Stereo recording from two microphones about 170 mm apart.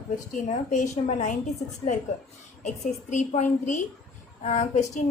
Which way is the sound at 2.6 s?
45° left (ahead or behind).